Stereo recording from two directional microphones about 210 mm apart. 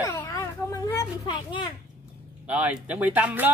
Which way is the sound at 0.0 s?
15° left (ahead or behind).